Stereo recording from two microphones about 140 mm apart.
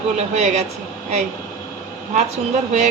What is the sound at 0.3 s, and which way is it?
Speech, 55° right (ahead or behind).